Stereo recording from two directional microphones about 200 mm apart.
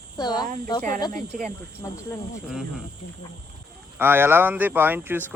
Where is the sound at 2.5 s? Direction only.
Centre (ahead or behind).